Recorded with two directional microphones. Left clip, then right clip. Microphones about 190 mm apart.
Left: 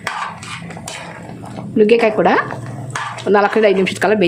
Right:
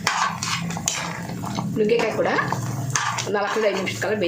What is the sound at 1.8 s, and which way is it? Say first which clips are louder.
Speech: left 9 dB; 55° left (ahead or behind).